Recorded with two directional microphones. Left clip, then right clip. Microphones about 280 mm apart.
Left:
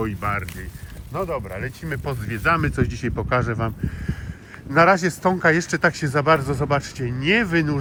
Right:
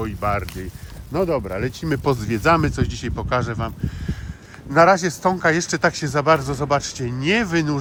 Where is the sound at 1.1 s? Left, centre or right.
Right.